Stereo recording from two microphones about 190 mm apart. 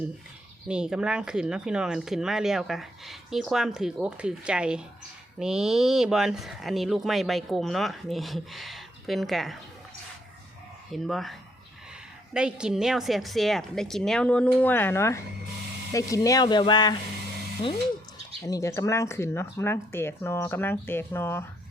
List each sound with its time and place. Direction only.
0.7 s speech: 5° right (ahead or behind)
10.9 s speech: centre (ahead or behind); by 17.0 s 20° left (ahead or behind)
18.4 s speech: 15° left (ahead or behind)